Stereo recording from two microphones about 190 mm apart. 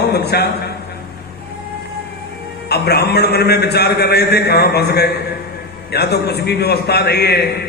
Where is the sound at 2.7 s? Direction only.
60° left (ahead or behind).